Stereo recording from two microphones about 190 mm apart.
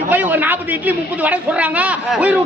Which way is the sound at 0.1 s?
10° right (ahead or behind).